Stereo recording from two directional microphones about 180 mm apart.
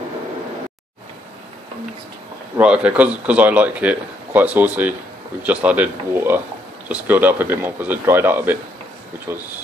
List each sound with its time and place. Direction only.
2.5 s a man's voice: 5° right (ahead or behind)